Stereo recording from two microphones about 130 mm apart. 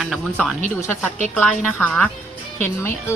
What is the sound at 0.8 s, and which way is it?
Speech, 15° left (ahead or behind).